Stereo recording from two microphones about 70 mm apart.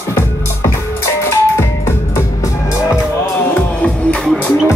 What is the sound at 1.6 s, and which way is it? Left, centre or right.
Music, left.